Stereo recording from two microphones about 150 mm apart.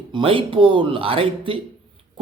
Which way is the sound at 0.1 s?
35° right (ahead or behind).